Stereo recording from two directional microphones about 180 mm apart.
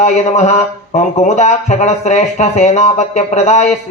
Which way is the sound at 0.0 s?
40° left (ahead or behind).